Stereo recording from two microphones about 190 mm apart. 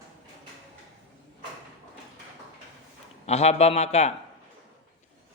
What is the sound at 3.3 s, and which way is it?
Speech, 35° left (ahead or behind).